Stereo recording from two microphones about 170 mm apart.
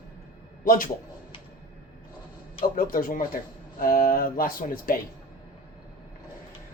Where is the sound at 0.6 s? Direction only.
55° left (ahead or behind).